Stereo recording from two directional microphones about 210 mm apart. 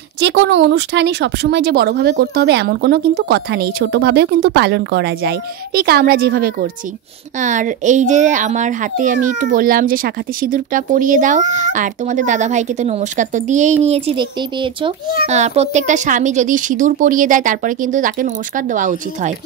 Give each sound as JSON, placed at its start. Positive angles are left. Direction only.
{"t": 0.2, "sound": "a child's voice", "side_deg": -55}
{"t": 14.0, "sound": "a child's voice", "side_deg": -25}